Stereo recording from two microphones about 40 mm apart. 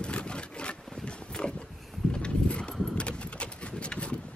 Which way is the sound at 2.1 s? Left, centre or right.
Left.